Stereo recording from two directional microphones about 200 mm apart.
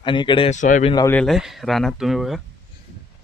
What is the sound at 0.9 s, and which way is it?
Speech, 15° left (ahead or behind).